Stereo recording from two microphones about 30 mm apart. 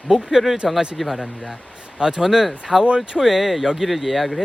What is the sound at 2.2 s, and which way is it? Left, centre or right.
Speech, centre.